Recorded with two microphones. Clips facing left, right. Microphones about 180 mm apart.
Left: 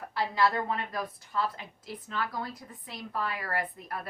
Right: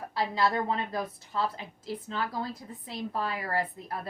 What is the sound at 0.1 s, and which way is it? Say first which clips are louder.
A woman's voice: even; 25° right (ahead or behind).